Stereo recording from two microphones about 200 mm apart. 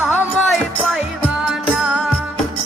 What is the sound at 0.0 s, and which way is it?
Music, 10° right (ahead or behind).